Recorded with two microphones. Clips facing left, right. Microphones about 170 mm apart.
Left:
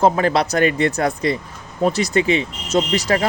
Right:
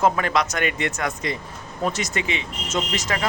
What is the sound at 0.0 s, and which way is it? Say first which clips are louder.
Speech: left 5 dB; 35° left (ahead or behind).